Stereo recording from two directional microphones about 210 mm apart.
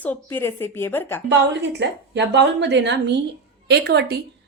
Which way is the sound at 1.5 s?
55° right (ahead or behind).